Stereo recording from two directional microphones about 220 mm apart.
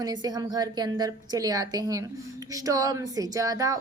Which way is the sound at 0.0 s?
15° right (ahead or behind).